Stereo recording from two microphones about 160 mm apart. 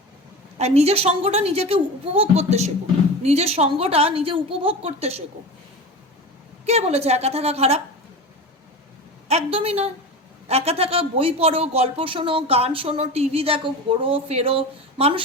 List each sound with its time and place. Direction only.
0.6 s speech: 40° right (ahead or behind)
6.7 s speech: 40° right (ahead or behind)
9.3 s speech: 40° right (ahead or behind)